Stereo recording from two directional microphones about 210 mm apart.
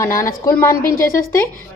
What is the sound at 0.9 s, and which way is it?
Speech, 40° left (ahead or behind).